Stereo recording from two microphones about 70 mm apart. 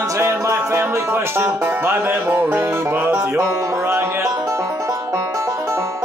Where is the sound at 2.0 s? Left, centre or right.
Right.